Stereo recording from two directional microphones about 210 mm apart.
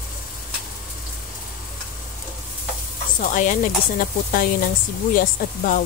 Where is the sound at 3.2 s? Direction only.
40° left (ahead or behind).